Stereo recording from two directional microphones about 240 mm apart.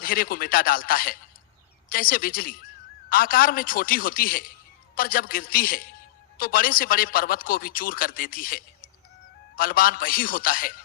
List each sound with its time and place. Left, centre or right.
0.0 s a man's voice: left